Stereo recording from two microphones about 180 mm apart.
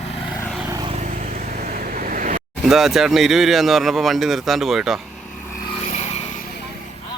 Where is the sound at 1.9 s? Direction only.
50° right (ahead or behind).